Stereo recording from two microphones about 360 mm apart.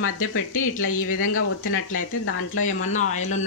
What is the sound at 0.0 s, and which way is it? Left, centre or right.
Speech, left.